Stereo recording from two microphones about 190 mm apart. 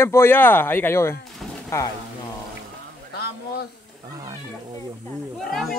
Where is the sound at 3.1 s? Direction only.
55° left (ahead or behind).